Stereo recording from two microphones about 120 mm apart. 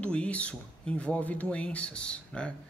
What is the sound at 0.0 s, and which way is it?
Speech, 10° left (ahead or behind).